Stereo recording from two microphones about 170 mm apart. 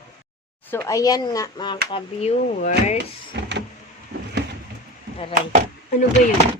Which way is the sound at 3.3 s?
80° right.